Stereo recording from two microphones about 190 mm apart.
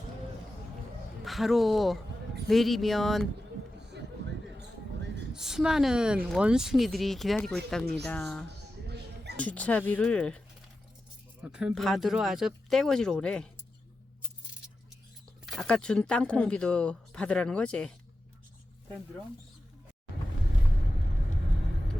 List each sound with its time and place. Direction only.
1.2 s speech: centre (ahead or behind)
5.3 s a woman's voice: 5° right (ahead or behind)
8.4 s mouse: 60° right (ahead or behind)
9.4 s speech: 5° left (ahead or behind)
11.5 s speech: centre (ahead or behind)
15.4 s speech: centre (ahead or behind)